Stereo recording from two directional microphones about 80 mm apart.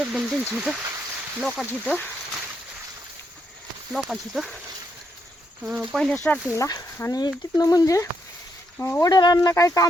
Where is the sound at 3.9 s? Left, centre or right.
Centre.